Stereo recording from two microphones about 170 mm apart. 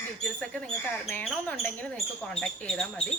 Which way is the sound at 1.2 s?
5° left (ahead or behind).